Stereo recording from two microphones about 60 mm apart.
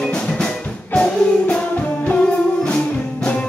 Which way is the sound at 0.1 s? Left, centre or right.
Centre.